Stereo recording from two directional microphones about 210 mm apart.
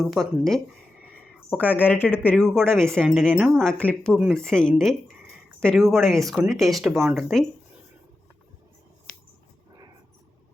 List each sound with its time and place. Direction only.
0.0 s speech: centre (ahead or behind)